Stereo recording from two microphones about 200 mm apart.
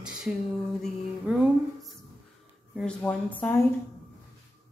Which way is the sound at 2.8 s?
5° left (ahead or behind).